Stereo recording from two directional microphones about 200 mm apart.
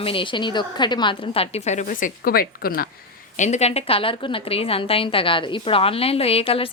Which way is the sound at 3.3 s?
35° left (ahead or behind).